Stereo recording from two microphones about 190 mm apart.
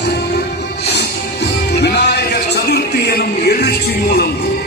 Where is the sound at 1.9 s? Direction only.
60° left (ahead or behind).